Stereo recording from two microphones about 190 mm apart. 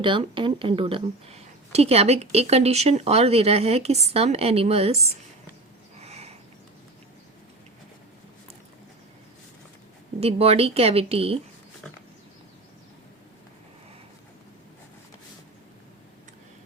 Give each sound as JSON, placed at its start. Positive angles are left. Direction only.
{"t": 0.0, "sound": "speech", "side_deg": -25}
{"t": 6.0, "sound": "a sound", "side_deg": -35}
{"t": 10.2, "sound": "speech", "side_deg": -30}